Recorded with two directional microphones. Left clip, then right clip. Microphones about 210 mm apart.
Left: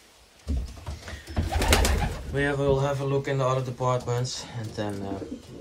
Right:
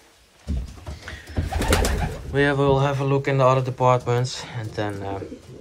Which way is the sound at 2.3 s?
10° left (ahead or behind).